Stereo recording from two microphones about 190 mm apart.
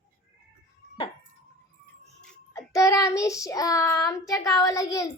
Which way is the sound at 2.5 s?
15° left (ahead or behind).